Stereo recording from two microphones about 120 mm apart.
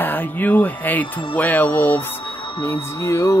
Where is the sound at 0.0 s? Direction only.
15° left (ahead or behind).